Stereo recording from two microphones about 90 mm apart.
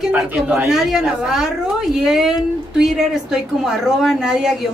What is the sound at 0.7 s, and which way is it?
A woman's voice, 5° right (ahead or behind).